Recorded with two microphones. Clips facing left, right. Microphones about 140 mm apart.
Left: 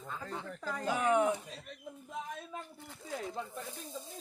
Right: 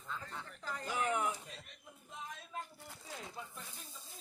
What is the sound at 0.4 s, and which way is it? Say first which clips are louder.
Speech: left 10 dB; 80° left.